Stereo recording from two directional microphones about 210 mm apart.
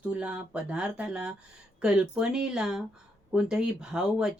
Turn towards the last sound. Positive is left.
turn(degrees=-5)  # may be behind; listen again after turning